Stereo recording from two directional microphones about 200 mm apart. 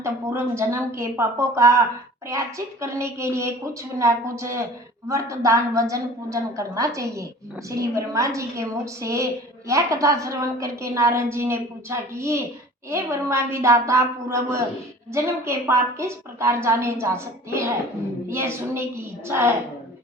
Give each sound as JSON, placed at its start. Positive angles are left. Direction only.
{"t": 0.0, "sound": "a woman's voice", "side_deg": -15}